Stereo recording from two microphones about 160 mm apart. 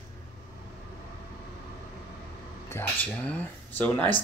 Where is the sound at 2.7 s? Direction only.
10° left (ahead or behind).